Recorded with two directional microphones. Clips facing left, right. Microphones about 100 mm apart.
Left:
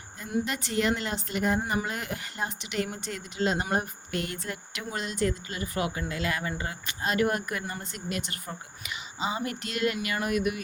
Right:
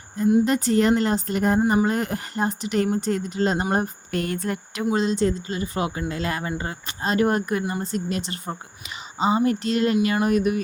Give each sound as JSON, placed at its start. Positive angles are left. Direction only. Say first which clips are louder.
{"t": 0.4, "sound": "speech", "louder": "right 9 dB", "side_deg": -40}
{"t": 4.9, "sound": "speech", "louder": "right 8 dB", "side_deg": -30}